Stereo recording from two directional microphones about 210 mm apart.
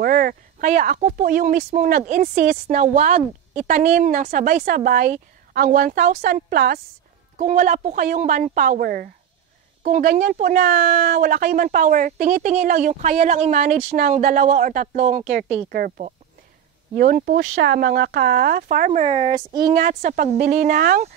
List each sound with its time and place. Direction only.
0.0 s speech: 45° right (ahead or behind)
15.5 s speech: 45° right (ahead or behind)
17.4 s speech: 60° right (ahead or behind); by 21.1 s 40° right (ahead or behind)